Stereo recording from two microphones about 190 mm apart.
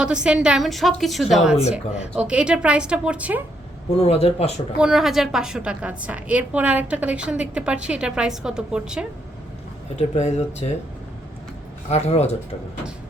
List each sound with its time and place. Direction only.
0.0 s a woman's voice: 5° right (ahead or behind)
3.9 s speech: 30° left (ahead or behind)
4.8 s a woman's voice: 5° right (ahead or behind)
9.9 s speech: 35° left (ahead or behind)
11.9 s speech: 35° left (ahead or behind)